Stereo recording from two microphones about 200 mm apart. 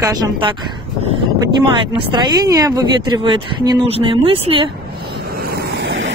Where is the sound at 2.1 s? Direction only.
20° right (ahead or behind).